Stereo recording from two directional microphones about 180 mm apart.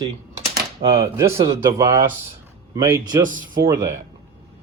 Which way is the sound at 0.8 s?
45° right (ahead or behind).